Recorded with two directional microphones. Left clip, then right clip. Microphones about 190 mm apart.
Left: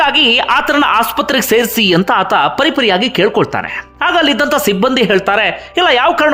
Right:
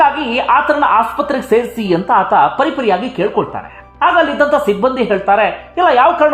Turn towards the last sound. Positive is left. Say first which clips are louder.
# right 1 dB
turn(degrees=20)  # may be behind; listen again after turning